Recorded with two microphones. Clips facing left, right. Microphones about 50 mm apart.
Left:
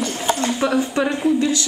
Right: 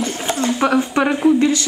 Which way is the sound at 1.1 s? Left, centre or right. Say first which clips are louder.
Right 4 dB; centre.